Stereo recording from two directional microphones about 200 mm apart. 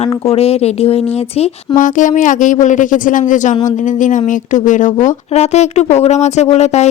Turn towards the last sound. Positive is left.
turn(degrees=35)  # may be behind; listen again after turning